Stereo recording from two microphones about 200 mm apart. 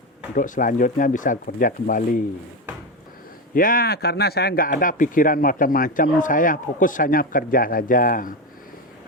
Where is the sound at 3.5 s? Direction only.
45° left (ahead or behind).